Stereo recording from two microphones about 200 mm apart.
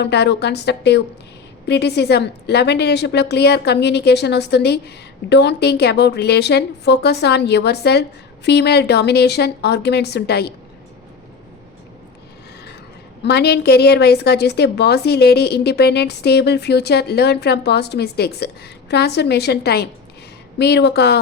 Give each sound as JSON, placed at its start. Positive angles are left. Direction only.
{"t": 0.0, "sound": "a woman's voice", "side_deg": 60}
{"t": 13.2, "sound": "a woman's voice", "side_deg": 55}